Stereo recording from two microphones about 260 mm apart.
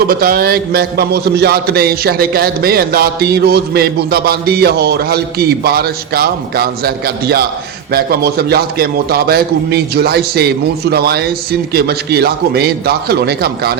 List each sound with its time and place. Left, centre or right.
0.1 s a man's voice: right